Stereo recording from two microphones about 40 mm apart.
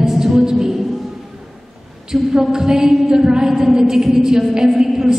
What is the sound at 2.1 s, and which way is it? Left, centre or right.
A woman's voice, centre.